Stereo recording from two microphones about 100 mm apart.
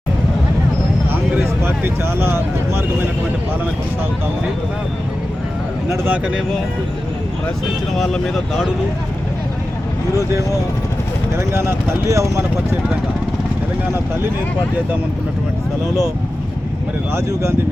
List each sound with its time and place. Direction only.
1.3 s speech: 20° right (ahead or behind)
6.1 s speech: 10° right (ahead or behind)
7.9 s speech: 5° left (ahead or behind)
11.3 s speech: 25° right (ahead or behind)